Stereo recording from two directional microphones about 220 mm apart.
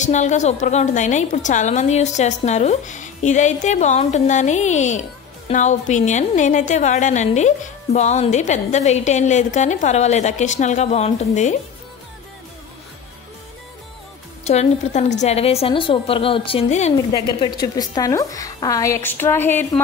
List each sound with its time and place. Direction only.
0.0 s a woman's voice: 30° left (ahead or behind)
14.4 s a woman's voice: 30° left (ahead or behind)
17.1 s a woman's voice: 20° left (ahead or behind)